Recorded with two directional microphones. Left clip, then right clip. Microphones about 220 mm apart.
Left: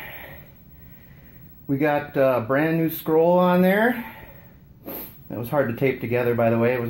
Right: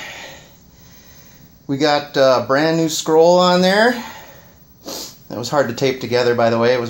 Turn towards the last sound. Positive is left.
turn(degrees=-5)  # may be behind; listen again after turning